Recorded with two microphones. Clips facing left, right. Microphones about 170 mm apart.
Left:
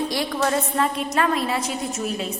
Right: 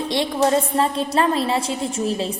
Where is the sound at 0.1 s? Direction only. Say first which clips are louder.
Right 4 dB; 25° right (ahead or behind).